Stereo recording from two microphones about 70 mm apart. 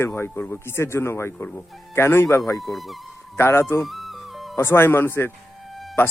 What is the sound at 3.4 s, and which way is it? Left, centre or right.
Speech, left.